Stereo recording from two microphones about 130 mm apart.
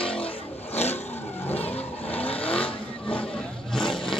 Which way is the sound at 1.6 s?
50° left (ahead or behind).